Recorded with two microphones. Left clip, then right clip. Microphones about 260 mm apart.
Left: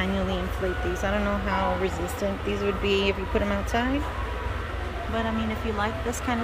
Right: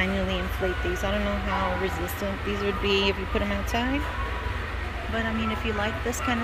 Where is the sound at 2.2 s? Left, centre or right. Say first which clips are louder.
Left 4 dB; centre.